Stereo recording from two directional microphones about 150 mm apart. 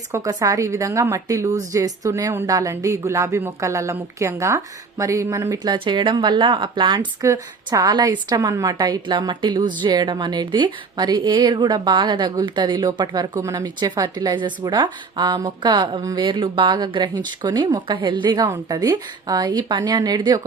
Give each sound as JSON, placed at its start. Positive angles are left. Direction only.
{"t": 0.1, "sound": "a woman's voice", "side_deg": -25}